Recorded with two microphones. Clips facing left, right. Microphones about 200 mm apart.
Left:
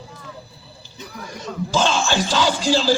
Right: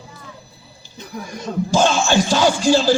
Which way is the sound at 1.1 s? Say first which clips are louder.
Right 5 dB; 50° right (ahead or behind).